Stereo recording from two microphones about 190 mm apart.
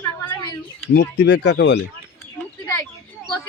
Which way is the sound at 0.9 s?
65° left (ahead or behind).